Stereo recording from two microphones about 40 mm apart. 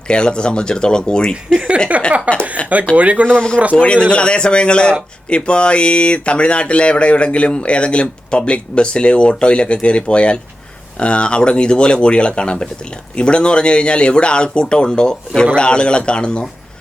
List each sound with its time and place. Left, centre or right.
0.1 s speech: left
1.9 s speech: right
2.6 s speech: left
2.9 s speech: right
3.2 s speech: centre
3.8 s speech: left